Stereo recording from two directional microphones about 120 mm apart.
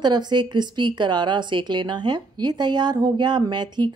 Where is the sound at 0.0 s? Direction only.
35° right (ahead or behind).